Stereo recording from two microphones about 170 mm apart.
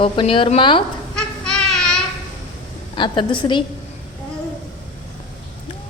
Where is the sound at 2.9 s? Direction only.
30° left (ahead or behind).